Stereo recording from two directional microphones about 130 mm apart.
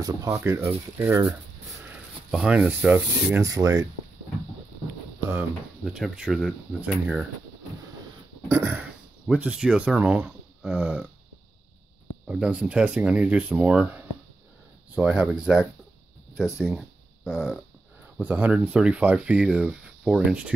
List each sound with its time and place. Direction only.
0.0 s speech: 25° right (ahead or behind)
1.9 s speech: 10° right (ahead or behind)
3.3 s speech: 25° right (ahead or behind)
5.9 s speech: 5° right (ahead or behind)
8.5 s speech: 20° right (ahead or behind)
9.3 s speech: 10° right (ahead or behind)
12.3 s speech: 10° right (ahead or behind)
18.2 s speech: 10° right (ahead or behind)